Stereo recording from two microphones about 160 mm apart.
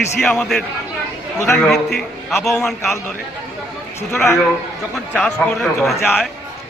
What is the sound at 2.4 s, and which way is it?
Speech, centre (ahead or behind).